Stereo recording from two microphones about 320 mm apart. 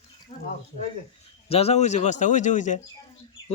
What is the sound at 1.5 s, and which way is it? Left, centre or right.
Speech, centre.